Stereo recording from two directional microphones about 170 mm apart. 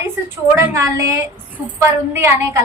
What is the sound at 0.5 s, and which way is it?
A woman's voice, 15° right (ahead or behind).